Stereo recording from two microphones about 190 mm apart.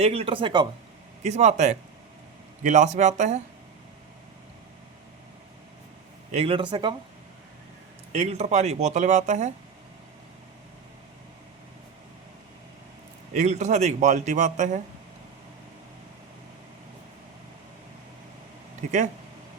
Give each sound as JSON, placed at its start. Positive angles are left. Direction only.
{"t": 0.0, "sound": "speech", "side_deg": -30}
{"t": 1.2, "sound": "speech", "side_deg": -35}
{"t": 6.3, "sound": "speech", "side_deg": -30}
{"t": 8.1, "sound": "speech", "side_deg": -35}
{"t": 13.3, "sound": "speech", "side_deg": -40}
{"t": 18.8, "sound": "speech", "side_deg": -40}